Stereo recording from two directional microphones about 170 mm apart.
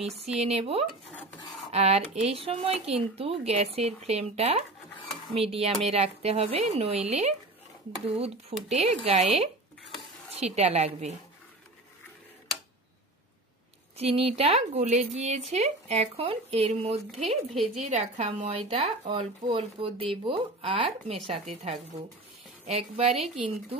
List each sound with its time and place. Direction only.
0.2 s speech: 35° right (ahead or behind)
10.3 s speech: 40° right (ahead or behind)
13.9 s speech: 35° right (ahead or behind)
23.1 s speech: centre (ahead or behind)